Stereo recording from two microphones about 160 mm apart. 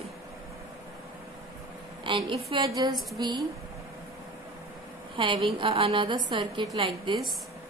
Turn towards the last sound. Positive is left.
turn(degrees=-30)  # may be behind; listen again after turning